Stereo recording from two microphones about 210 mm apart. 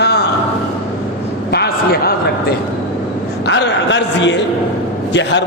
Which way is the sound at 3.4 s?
55° left (ahead or behind).